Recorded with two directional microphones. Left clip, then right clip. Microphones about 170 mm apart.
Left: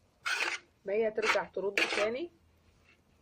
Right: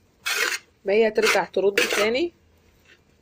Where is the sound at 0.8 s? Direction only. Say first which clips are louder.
Right 11 dB; 40° right (ahead or behind).